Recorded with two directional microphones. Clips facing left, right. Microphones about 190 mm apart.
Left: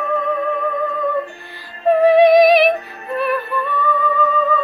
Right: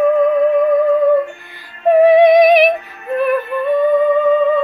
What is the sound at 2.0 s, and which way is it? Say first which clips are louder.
Music: right 1 dB; 15° right (ahead or behind).